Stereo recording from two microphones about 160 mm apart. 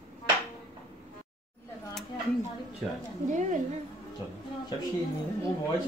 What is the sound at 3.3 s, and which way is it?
Speech, 50° right (ahead or behind).